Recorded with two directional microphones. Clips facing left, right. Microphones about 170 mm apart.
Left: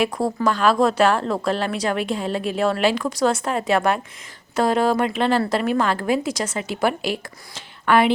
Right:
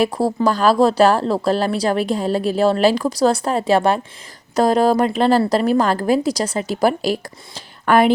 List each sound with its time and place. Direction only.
0.0 s a woman's voice: 35° right (ahead or behind)